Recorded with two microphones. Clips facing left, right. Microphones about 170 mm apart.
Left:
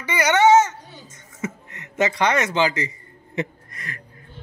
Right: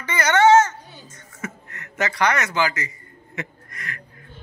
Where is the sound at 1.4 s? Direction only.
20° left (ahead or behind).